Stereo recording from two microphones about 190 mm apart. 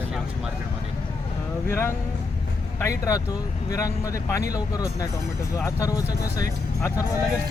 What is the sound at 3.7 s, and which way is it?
Speech, 15° left (ahead or behind).